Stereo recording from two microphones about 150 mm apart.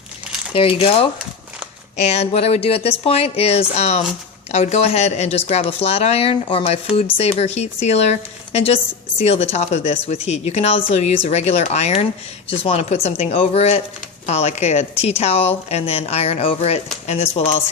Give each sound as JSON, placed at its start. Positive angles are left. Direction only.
{"t": 0.5, "sound": "speech", "side_deg": 35}